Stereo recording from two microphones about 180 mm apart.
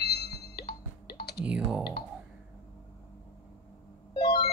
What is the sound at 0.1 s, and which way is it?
Music, 65° left (ahead or behind).